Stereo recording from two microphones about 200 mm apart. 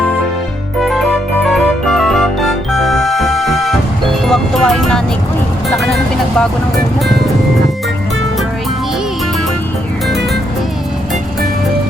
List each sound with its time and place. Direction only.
0.8 s music: centre (ahead or behind)
5.7 s vehicle: centre (ahead or behind)